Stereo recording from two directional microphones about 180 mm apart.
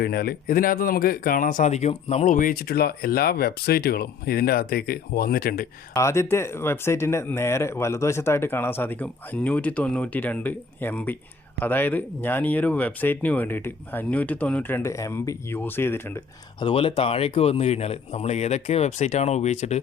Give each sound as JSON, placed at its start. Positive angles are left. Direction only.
{"t": 0.0, "sound": "speech", "side_deg": 60}
{"t": 5.9, "sound": "speech", "side_deg": 15}
{"t": 16.6, "sound": "speech", "side_deg": 30}